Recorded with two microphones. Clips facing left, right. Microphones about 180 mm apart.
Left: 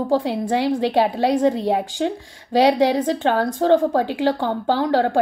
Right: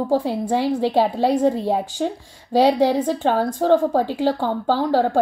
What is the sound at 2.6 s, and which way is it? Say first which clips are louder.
A woman's voice: even; 70° left (ahead or behind).